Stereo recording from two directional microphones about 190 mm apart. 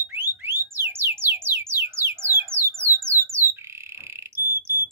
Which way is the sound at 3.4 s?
15° left (ahead or behind).